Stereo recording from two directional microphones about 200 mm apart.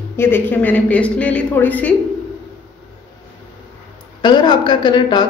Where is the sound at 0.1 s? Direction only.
10° left (ahead or behind).